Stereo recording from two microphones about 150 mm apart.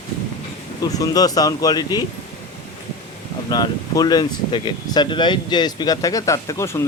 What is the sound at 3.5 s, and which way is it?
Speech, 25° left (ahead or behind).